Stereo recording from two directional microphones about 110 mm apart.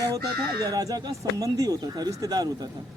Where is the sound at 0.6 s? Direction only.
35° right (ahead or behind).